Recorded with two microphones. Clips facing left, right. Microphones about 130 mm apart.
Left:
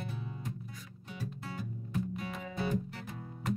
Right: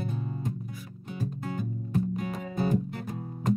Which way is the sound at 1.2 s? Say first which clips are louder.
Right 8 dB; 45° right (ahead or behind).